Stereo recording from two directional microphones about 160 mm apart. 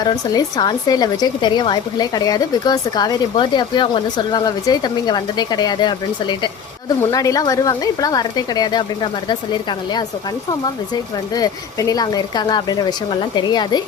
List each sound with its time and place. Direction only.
0.0 s speech: 25° left (ahead or behind)
7.0 s speech: 20° left (ahead or behind)
11.3 s speech: 25° left (ahead or behind)